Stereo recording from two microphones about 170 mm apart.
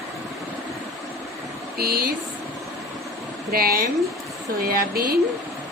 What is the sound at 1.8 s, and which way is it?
Speech, 60° right (ahead or behind).